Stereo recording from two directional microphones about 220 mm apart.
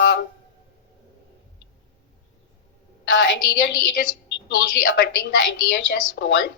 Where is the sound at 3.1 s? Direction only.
55° left (ahead or behind).